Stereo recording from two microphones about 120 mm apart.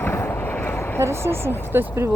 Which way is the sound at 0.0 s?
20° left (ahead or behind).